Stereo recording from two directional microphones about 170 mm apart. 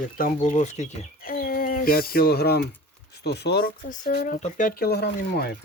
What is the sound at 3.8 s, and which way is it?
Speech, 55° left (ahead or behind).